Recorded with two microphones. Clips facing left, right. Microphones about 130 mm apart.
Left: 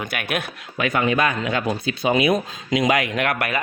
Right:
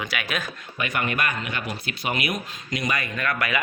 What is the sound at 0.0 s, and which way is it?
Speech, 50° left (ahead or behind).